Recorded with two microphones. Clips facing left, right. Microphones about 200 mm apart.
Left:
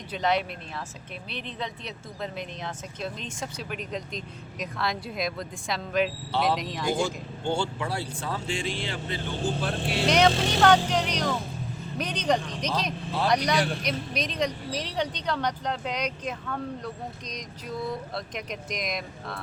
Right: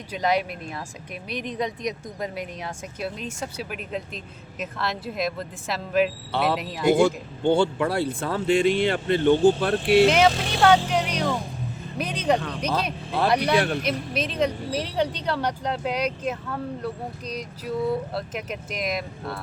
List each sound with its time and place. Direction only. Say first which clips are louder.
0.1 s speech: right 2 dB; 10° right (ahead or behind)
6.3 s speech: right 1 dB; 55° right (ahead or behind)
6.6 s speech: even; 5° right (ahead or behind)
6.9 s speech: right 8 dB; 60° right (ahead or behind)
10.1 s speech: right 2 dB; 5° right (ahead or behind)